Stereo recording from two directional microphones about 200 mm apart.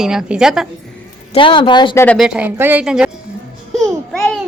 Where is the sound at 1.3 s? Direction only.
25° left (ahead or behind).